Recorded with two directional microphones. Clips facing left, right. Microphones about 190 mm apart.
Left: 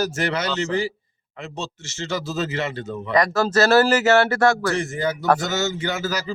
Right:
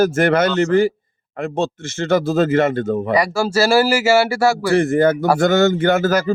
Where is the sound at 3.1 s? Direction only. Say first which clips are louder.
Left 1 dB; 10° right (ahead or behind).